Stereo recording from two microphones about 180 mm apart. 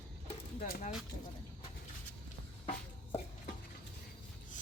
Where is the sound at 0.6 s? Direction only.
45° left (ahead or behind).